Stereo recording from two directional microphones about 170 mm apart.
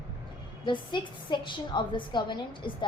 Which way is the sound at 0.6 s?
30° left (ahead or behind).